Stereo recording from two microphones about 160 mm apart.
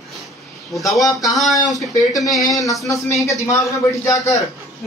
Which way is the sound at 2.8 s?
20° left (ahead or behind).